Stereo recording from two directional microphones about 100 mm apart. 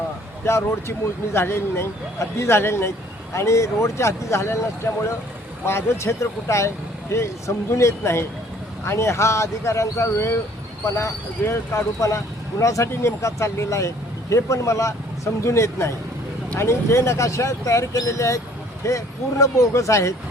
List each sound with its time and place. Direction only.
0.4 s speech: 25° left (ahead or behind)
5.6 s speech: 25° left (ahead or behind)